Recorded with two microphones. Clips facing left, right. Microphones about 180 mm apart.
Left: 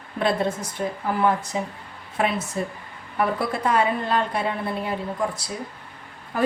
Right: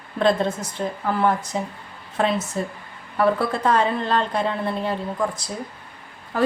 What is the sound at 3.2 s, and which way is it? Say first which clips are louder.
A woman's voice: right 4 dB; 10° left (ahead or behind).